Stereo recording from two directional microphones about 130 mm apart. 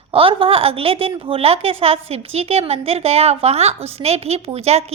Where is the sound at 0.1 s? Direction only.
45° right (ahead or behind).